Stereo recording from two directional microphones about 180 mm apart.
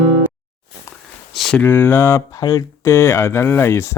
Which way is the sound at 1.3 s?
Centre (ahead or behind).